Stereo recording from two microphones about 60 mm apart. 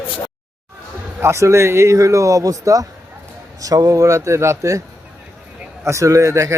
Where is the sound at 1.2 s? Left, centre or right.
Right.